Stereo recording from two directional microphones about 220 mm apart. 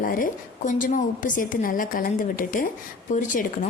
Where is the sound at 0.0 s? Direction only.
40° left (ahead or behind).